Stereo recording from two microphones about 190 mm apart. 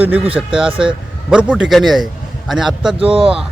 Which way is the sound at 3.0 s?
30° right (ahead or behind).